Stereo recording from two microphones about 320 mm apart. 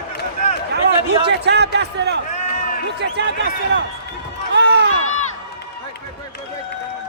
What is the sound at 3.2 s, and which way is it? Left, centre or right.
Speech, right.